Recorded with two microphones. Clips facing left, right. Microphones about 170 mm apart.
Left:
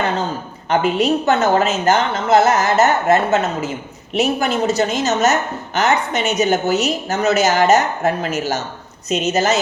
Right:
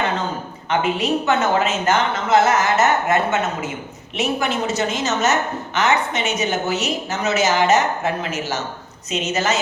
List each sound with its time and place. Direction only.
0.7 s a woman's voice: 35° left (ahead or behind)